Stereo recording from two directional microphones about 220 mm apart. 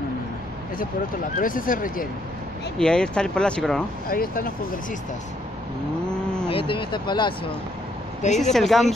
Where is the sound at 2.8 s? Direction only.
5° left (ahead or behind).